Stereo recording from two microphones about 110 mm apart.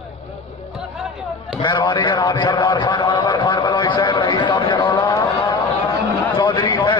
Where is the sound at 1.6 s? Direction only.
45° left (ahead or behind).